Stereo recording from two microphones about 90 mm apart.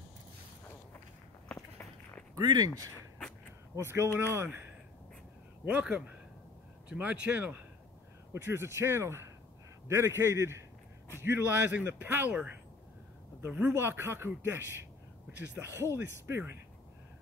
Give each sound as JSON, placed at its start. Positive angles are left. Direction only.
{"t": 2.3, "sound": "speech", "side_deg": -45}
{"t": 3.7, "sound": "a man's voice", "side_deg": -30}
{"t": 5.7, "sound": "a man's voice", "side_deg": -15}
{"t": 8.3, "sound": "a man's voice", "side_deg": -30}
{"t": 13.5, "sound": "a man's voice", "side_deg": -15}